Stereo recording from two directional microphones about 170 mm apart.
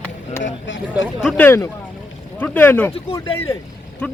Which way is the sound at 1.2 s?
Centre (ahead or behind).